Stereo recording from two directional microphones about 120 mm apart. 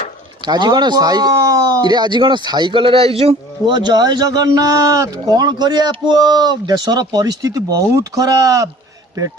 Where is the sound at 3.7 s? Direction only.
35° right (ahead or behind).